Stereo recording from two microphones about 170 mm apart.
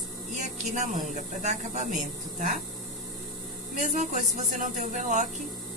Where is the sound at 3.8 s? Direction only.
50° right (ahead or behind).